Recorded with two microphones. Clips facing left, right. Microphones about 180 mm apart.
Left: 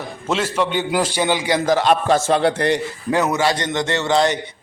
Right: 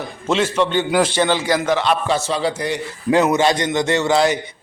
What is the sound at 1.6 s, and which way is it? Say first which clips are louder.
A man's voice: left 2 dB; 45° left (ahead or behind).